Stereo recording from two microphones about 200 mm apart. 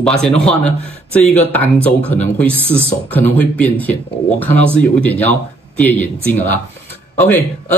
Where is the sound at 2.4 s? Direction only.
30° right (ahead or behind).